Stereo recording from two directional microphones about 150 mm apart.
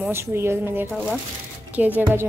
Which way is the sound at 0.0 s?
15° right (ahead or behind).